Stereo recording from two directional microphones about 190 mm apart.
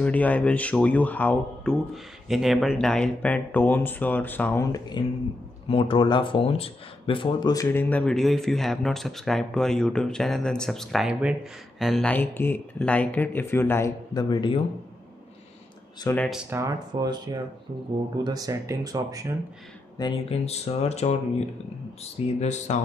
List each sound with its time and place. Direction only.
0.0 s speech: 10° left (ahead or behind)
4.7 s speech: 25° left (ahead or behind)
16.0 s speech: 15° left (ahead or behind)
16.3 s speech: 5° right (ahead or behind)
16.5 s speech: 20° right (ahead or behind)
20.0 s speech: 30° left (ahead or behind)